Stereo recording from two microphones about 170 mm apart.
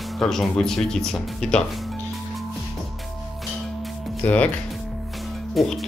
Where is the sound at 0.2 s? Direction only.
5° left (ahead or behind).